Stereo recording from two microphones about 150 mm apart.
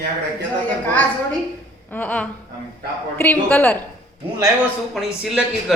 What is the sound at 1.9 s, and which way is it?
A woman's voice, 10° left (ahead or behind).